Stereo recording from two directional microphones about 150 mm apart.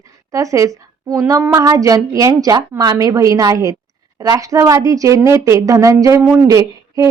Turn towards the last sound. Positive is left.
turn(degrees=-20)  # may be behind; listen again after turning